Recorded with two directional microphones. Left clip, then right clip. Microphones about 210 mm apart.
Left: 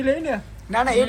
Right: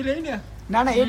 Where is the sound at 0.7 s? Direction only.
15° right (ahead or behind).